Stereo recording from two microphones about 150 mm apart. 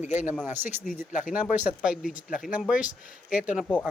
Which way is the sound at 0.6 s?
60° left (ahead or behind).